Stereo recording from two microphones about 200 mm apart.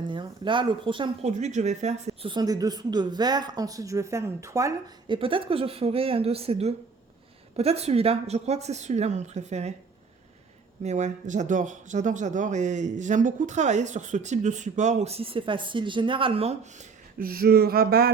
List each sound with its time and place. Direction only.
0.1 s speech: 25° right (ahead or behind)
10.8 s speech: 35° right (ahead or behind)
17.2 s speech: 50° right (ahead or behind)